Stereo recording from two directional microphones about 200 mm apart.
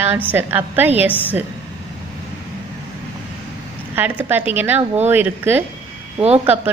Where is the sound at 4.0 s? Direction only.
10° right (ahead or behind).